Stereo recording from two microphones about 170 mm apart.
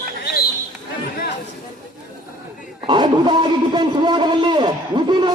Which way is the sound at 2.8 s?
25° right (ahead or behind).